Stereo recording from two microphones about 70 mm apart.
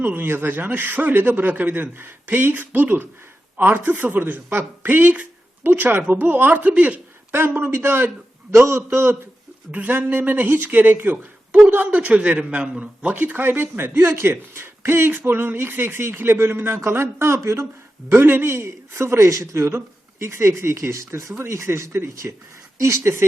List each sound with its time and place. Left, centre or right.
0.0 s speech: right
7.3 s speech: right
9.7 s speech: right